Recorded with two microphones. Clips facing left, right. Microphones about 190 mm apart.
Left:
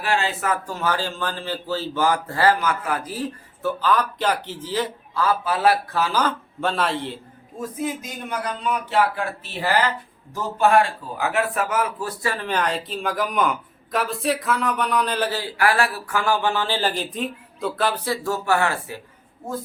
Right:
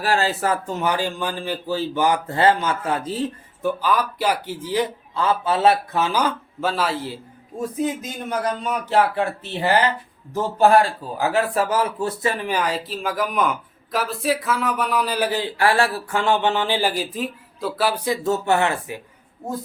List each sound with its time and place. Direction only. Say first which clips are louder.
0.0 s a man's voice: right 3 dB; 40° right (ahead or behind); by 6.1 s 20° right (ahead or behind)
6.1 s speech: right 1 dB; 5° right (ahead or behind)
8.3 s a man's voice: right 2 dB; 40° right (ahead or behind)
9.1 s a man's voice: right 5 dB; 25° right (ahead or behind)
10.6 s a man's voice: right 2 dB; 35° right (ahead or behind); by 18.9 s 20° right (ahead or behind)